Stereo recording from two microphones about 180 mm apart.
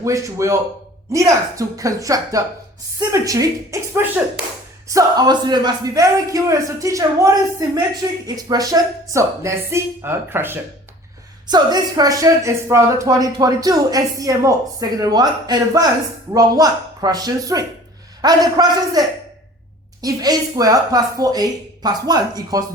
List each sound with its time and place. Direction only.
0.0 s a man's voice: 15° right (ahead or behind)
11.4 s speech: 25° right (ahead or behind)